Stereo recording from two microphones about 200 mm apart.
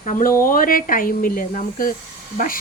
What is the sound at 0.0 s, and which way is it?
Speech, 40° left (ahead or behind).